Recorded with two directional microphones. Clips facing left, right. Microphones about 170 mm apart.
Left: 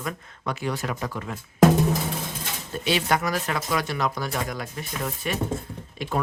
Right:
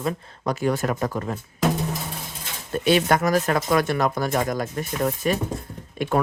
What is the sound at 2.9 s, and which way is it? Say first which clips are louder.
Speech: right 5 dB; 50° right (ahead or behind).